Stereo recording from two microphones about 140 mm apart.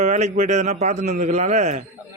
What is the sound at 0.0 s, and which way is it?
A man's voice, 55° right (ahead or behind).